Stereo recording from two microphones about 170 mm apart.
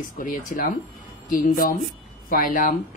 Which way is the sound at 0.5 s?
50° left (ahead or behind).